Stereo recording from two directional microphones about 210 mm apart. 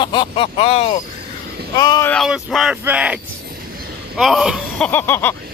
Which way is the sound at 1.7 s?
20° left (ahead or behind).